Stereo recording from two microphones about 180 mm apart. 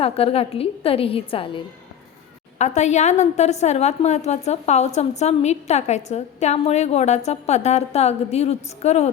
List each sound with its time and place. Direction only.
0.0 s a woman's voice: 35° left (ahead or behind)